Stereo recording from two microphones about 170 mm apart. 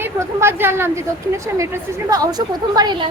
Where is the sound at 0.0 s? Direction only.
15° right (ahead or behind).